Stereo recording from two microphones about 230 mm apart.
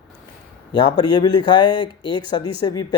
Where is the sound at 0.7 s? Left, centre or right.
Centre.